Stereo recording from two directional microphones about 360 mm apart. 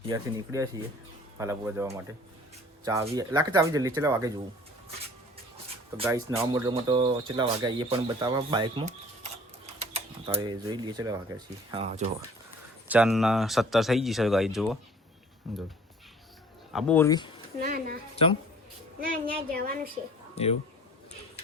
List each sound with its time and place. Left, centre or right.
0.1 s speech: centre
6.0 s speech: centre
12.9 s speech: centre
16.7 s speech: centre
17.6 s speech: right
19.5 s speech: right
20.3 s speech: centre